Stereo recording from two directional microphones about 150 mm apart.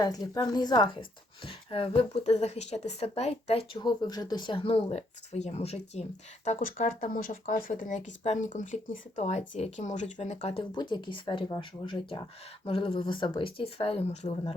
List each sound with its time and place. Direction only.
0.0 s a woman's voice: 25° left (ahead or behind)
1.5 s a sound: 35° left (ahead or behind)
2.0 s speech: 45° left (ahead or behind)